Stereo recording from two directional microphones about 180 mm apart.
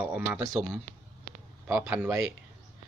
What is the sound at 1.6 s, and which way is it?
Speech, 10° right (ahead or behind).